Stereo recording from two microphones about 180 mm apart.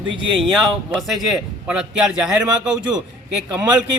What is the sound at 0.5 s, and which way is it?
A man's voice, centre (ahead or behind).